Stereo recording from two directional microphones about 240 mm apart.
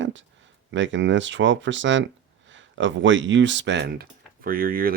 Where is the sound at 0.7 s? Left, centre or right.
Right.